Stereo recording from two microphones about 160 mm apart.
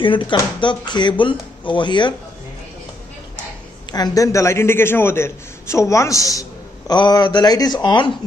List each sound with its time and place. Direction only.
0.0 s a man's voice: 30° left (ahead or behind)
3.9 s a man's voice: 25° left (ahead or behind)